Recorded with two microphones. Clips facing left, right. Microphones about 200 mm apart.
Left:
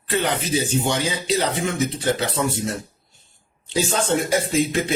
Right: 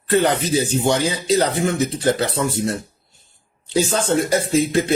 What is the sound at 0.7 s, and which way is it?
Speech, 40° right (ahead or behind).